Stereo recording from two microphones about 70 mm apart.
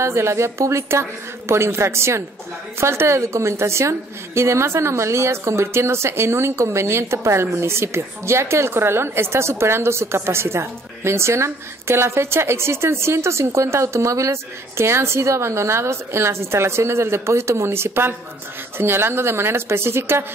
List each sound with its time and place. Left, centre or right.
0.0 s a woman's voice: right